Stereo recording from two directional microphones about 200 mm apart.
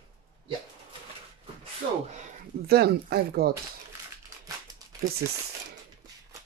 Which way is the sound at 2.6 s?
50° right (ahead or behind).